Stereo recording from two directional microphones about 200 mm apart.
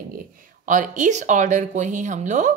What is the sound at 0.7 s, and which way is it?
Speech, 40° right (ahead or behind).